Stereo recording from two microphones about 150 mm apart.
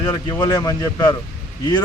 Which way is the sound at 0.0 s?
30° left (ahead or behind).